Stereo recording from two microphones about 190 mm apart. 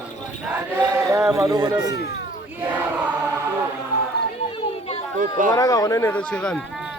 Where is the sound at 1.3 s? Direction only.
20° right (ahead or behind).